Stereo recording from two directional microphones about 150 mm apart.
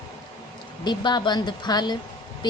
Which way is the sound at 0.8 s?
30° left (ahead or behind).